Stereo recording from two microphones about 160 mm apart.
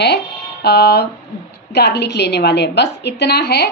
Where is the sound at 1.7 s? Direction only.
90° left.